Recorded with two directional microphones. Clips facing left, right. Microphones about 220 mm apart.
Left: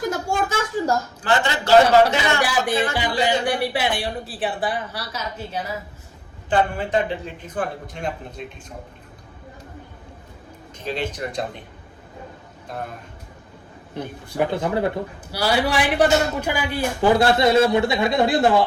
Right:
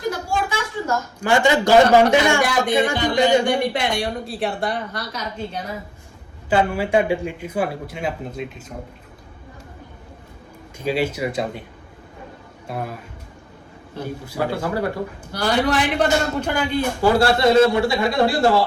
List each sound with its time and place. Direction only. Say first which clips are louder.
0.1 s a sound: left 1 dB; 45° left (ahead or behind)
1.2 s speech: right 10 dB; 15° right (ahead or behind)
3.0 s a man's voice: right 5 dB; 10° left (ahead or behind)
6.5 s speech: right 2 dB; 10° right (ahead or behind)
10.8 s speech: right 5 dB; 10° right (ahead or behind)
12.6 s a man's voice: right 3 dB; 5° right (ahead or behind)
14.0 s speech: left 1 dB; 20° left (ahead or behind)
15.3 s a man's voice: right 1 dB; 5° left (ahead or behind)
17.0 s speech: even; 20° left (ahead or behind)